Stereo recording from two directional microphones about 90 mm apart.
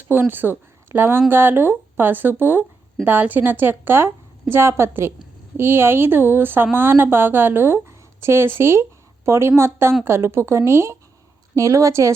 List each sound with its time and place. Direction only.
0.1 s a woman's voice: 25° right (ahead or behind)